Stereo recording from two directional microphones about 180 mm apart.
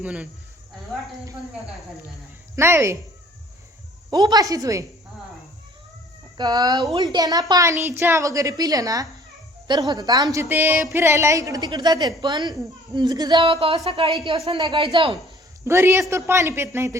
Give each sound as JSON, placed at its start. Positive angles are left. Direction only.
{"t": 0.0, "sound": "a woman's voice", "side_deg": -5}
{"t": 2.6, "sound": "a woman's voice", "side_deg": -15}
{"t": 4.1, "sound": "a woman's voice", "side_deg": -25}
{"t": 6.3, "sound": "a woman's voice", "side_deg": -25}
{"t": 15.6, "sound": "a woman's voice", "side_deg": -15}